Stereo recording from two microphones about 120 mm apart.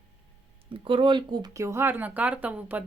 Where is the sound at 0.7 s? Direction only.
45° right (ahead or behind).